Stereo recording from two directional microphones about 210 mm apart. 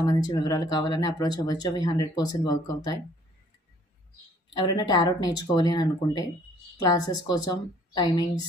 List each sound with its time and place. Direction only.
0.0 s speech: 20° left (ahead or behind)
4.6 s speech: 20° left (ahead or behind)